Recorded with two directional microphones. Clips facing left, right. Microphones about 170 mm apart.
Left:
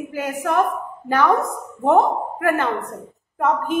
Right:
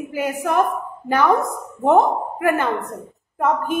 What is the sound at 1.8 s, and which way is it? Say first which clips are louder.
Speech: right 1 dB; 10° right (ahead or behind).